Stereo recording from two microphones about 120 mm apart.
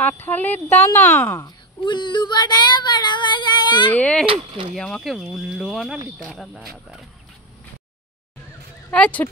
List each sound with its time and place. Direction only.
0.0 s speech: 15° left (ahead or behind)
1.4 s speech: 40° left (ahead or behind)
3.9 s speech: 10° left (ahead or behind)
4.3 s speech: 50° right (ahead or behind)
4.7 s speech: 5° left (ahead or behind)
8.9 s speech: 10° left (ahead or behind)